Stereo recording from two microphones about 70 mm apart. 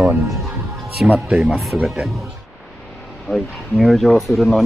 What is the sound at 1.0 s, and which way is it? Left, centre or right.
Speech, centre.